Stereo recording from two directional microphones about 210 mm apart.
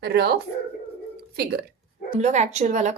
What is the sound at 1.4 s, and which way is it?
Speech, 50° right (ahead or behind).